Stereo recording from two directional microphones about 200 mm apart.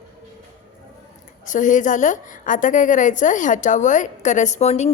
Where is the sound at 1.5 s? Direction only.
40° left (ahead or behind).